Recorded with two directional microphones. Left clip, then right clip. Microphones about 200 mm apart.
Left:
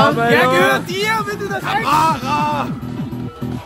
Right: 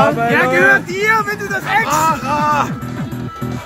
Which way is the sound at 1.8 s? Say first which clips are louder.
Even; 55° left (ahead or behind).